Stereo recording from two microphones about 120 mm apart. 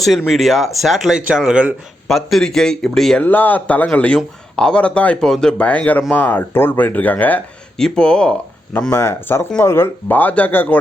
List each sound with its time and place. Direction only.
0.3 s speech: centre (ahead or behind)
8.9 s speech: 20° left (ahead or behind)